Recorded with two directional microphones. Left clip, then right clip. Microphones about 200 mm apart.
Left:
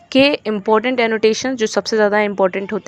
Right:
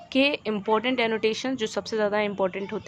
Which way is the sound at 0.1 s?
40° left (ahead or behind).